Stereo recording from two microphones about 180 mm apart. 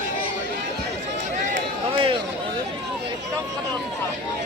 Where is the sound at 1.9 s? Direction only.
30° right (ahead or behind).